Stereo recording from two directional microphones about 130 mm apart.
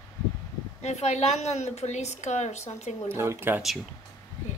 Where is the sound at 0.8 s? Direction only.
60° left (ahead or behind).